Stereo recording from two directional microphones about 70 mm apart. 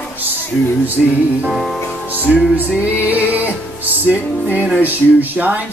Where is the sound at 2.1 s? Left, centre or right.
Right.